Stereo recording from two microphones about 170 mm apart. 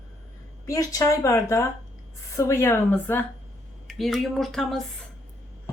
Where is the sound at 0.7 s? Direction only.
20° left (ahead or behind).